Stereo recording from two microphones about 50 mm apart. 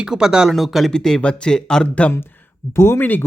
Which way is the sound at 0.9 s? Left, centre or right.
Centre.